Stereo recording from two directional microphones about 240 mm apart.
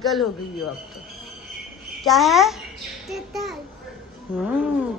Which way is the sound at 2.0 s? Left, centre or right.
Centre.